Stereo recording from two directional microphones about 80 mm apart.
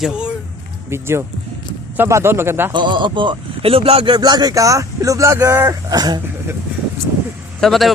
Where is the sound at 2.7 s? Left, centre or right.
Right.